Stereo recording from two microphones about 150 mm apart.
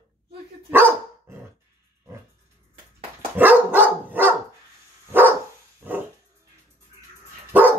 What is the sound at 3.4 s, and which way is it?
Dog, 10° right (ahead or behind).